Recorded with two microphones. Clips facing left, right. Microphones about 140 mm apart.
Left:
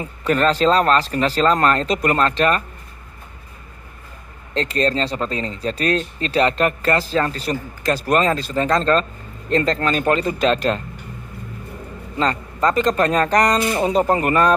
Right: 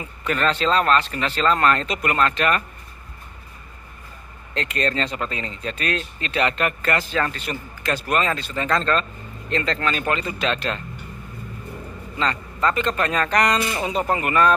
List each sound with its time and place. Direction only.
0.0 s speech: 35° left (ahead or behind)
4.6 s speech: 35° left (ahead or behind)
12.2 s speech: 40° left (ahead or behind)